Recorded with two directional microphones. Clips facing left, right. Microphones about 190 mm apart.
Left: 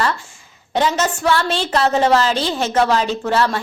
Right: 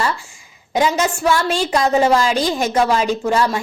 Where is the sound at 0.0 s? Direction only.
10° right (ahead or behind).